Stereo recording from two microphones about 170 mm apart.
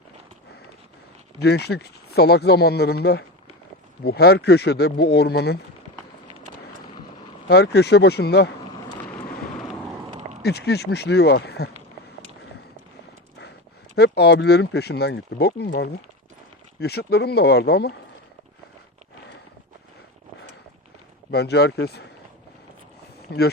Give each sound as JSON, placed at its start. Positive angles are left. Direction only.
{"t": 1.4, "sound": "speech", "side_deg": 75}
{"t": 7.4, "sound": "speech", "side_deg": 75}
{"t": 10.4, "sound": "speech", "side_deg": 75}
{"t": 13.9, "sound": "speech", "side_deg": 75}
{"t": 21.2, "sound": "speech", "side_deg": 75}
{"t": 23.3, "sound": "speech", "side_deg": 75}